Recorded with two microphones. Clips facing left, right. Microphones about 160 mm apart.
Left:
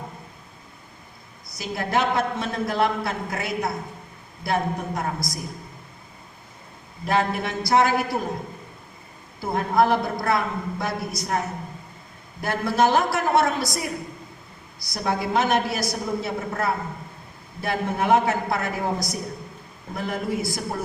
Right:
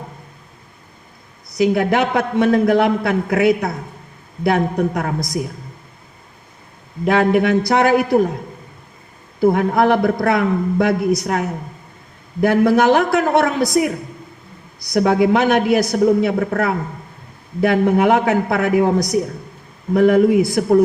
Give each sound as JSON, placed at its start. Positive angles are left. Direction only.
{"t": 1.5, "sound": "a man's voice", "side_deg": -65}
{"t": 7.0, "sound": "a man's voice", "side_deg": -65}
{"t": 9.4, "sound": "a man's voice", "side_deg": -60}
{"t": 14.9, "sound": "a man's voice", "side_deg": -60}
{"t": 19.9, "sound": "a man's voice", "side_deg": -60}